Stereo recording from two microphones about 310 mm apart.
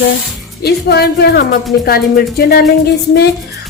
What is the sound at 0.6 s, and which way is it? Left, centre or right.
A woman's voice, left.